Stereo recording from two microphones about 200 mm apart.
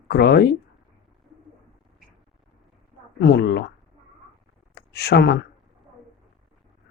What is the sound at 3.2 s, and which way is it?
Speech, 55° left (ahead or behind).